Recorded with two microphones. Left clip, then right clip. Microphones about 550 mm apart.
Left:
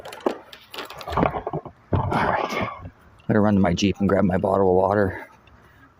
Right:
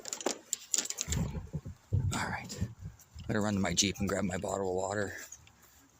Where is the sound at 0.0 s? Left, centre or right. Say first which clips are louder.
Left 10 dB; right.